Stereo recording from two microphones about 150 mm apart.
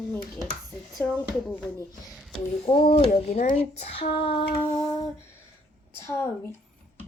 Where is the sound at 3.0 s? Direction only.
45° left (ahead or behind).